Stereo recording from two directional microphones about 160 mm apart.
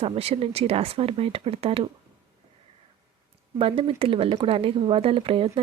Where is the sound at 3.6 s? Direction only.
35° right (ahead or behind).